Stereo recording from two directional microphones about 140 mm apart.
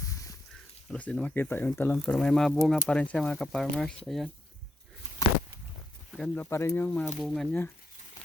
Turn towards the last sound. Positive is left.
turn(degrees=-5)  # may be behind; listen again after turning